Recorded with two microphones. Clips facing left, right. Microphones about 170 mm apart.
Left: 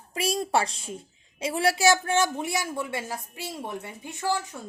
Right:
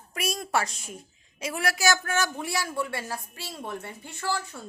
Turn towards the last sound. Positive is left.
turn(degrees=20)  # may be behind; listen again after turning